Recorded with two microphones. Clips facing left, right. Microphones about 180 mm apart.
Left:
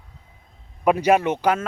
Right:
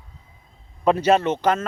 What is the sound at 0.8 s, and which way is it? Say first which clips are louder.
Speech: even; 10° left (ahead or behind).